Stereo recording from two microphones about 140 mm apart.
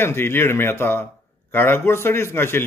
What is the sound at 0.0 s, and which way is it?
Speech, 15° left (ahead or behind).